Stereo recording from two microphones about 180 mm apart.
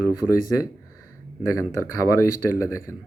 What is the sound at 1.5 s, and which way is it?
Speech, 15° left (ahead or behind).